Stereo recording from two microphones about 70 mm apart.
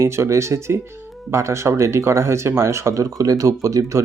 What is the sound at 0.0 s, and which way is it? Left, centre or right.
Speech, right.